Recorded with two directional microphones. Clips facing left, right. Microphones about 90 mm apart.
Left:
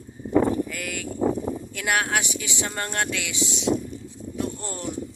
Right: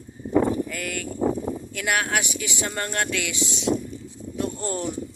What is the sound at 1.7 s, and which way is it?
Speech, 25° left (ahead or behind).